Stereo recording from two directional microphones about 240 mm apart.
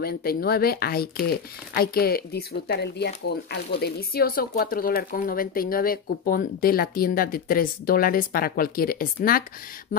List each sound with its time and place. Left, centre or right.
0.0 s speech: left